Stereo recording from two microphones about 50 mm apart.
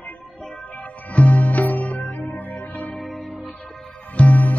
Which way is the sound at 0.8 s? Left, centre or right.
Left.